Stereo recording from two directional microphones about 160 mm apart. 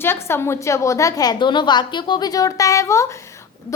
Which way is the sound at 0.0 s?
15° left (ahead or behind).